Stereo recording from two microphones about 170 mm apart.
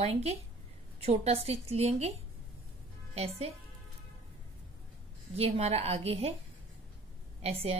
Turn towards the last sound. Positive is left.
turn(degrees=-35)  # may be behind; listen again after turning